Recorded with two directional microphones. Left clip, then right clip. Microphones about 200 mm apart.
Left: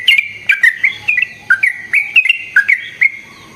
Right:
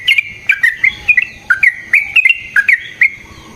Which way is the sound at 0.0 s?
5° left (ahead or behind).